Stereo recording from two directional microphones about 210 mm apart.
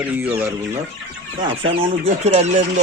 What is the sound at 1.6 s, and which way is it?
Speech, 25° right (ahead or behind).